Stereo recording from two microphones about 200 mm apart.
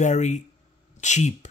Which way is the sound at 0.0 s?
35° left (ahead or behind).